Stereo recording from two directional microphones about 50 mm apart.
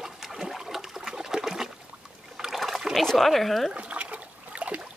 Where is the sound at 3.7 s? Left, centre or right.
Right.